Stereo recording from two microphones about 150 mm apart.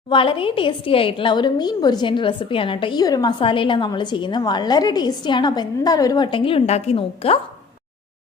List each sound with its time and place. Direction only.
0.1 s a woman's voice: 35° left (ahead or behind)